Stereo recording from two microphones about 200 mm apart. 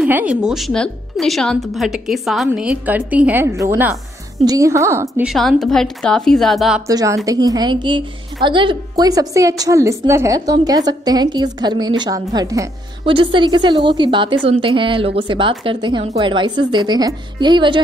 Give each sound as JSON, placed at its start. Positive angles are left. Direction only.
{"t": 0.0, "sound": "a woman's voice", "side_deg": -5}
{"t": 5.3, "sound": "speech", "side_deg": 0}
{"t": 6.9, "sound": "a woman's voice", "side_deg": -20}